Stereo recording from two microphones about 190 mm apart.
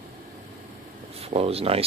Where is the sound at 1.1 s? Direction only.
30° right (ahead or behind).